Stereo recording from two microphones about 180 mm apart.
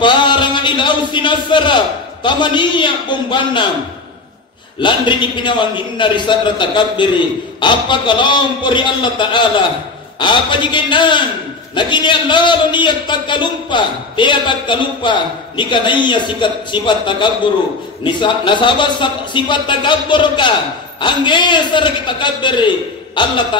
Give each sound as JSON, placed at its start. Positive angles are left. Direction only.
{"t": 0.0, "sound": "a sound", "side_deg": 25}
{"t": 2.2, "sound": "a man's voice", "side_deg": 25}
{"t": 4.8, "sound": "a man's voice", "side_deg": 25}